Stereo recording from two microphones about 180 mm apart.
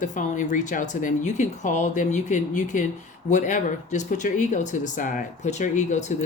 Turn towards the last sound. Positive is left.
turn(degrees=40)  # may be behind; listen again after turning